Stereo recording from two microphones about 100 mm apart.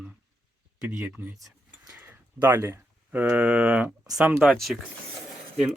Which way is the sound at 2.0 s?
20° right (ahead or behind).